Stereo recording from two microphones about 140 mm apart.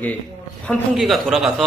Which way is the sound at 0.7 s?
Centre (ahead or behind).